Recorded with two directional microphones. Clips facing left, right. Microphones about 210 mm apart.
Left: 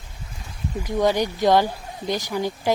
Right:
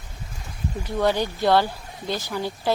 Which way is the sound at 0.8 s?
15° left (ahead or behind).